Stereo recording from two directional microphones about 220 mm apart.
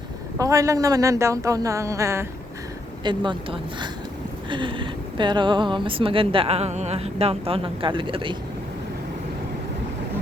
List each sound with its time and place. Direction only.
0.3 s speech: 15° right (ahead or behind)